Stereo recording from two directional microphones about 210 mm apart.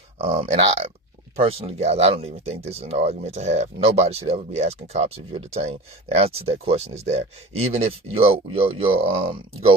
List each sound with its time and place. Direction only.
0.2 s speech: 30° right (ahead or behind)